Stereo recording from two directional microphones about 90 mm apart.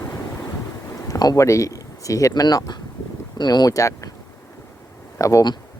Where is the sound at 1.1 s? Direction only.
45° left (ahead or behind).